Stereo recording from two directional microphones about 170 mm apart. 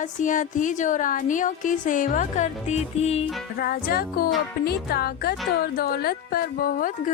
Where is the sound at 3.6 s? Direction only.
60° left (ahead or behind).